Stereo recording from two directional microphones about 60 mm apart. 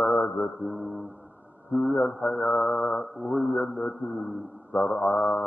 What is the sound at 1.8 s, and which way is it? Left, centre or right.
Mantra, left.